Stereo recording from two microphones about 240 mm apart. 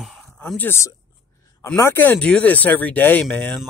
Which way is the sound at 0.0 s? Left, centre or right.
Centre.